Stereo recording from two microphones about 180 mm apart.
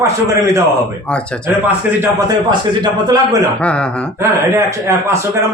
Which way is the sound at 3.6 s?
5° left (ahead or behind).